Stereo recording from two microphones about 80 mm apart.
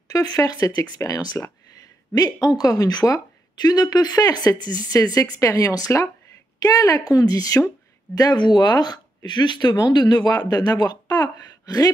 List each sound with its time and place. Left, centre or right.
0.1 s a woman's voice: left
4.9 s a woman's voice: left